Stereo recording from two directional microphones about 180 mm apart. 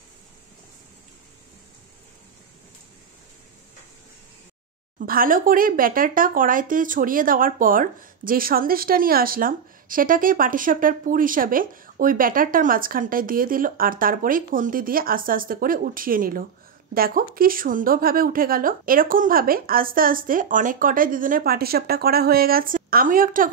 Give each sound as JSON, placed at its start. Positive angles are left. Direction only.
{"t": 4.9, "sound": "speech", "side_deg": -50}